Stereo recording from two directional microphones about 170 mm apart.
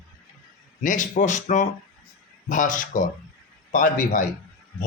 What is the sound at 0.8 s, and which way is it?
Speech, 50° left (ahead or behind).